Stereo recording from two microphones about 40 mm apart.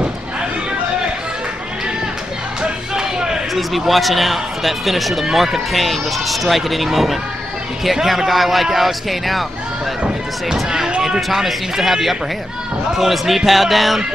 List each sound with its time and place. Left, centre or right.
2.6 s music: centre
3.5 s speech: centre
10.0 s a sound: centre
11.0 s speech: centre